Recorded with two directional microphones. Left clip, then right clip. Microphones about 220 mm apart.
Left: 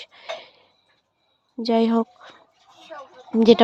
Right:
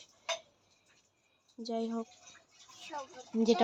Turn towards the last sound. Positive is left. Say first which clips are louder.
# left 14 dB
turn(degrees=35)  # may be behind; listen again after turning